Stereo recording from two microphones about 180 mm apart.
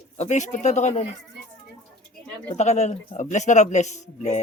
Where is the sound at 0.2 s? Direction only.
40° left (ahead or behind).